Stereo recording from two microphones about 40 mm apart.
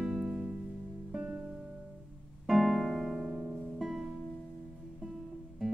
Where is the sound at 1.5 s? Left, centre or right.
Right.